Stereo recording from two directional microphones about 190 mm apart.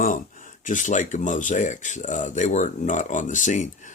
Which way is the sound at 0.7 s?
40° left (ahead or behind).